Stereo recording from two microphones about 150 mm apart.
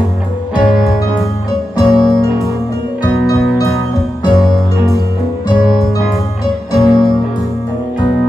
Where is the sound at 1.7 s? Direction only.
25° left (ahead or behind).